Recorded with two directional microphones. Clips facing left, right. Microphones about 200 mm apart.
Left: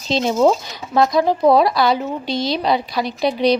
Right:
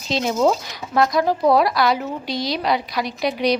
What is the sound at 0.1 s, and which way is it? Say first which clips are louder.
Speech: left 3 dB; 30° left (ahead or behind).